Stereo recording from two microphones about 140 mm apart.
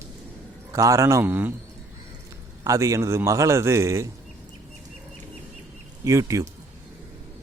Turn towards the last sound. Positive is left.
turn(degrees=-20)  # may be behind; listen again after turning